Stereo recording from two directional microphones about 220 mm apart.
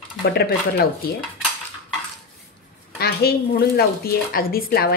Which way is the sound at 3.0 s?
45° left (ahead or behind).